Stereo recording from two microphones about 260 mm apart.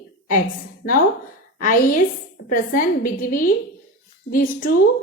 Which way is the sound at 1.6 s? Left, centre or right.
Left.